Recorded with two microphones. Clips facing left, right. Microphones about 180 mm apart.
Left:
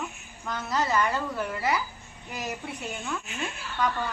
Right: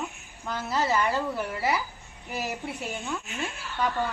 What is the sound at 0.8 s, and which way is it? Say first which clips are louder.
Speech: even; 25° right (ahead or behind).